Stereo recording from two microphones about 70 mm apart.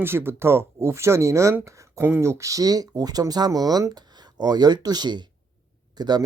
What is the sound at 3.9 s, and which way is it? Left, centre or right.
Speech, right.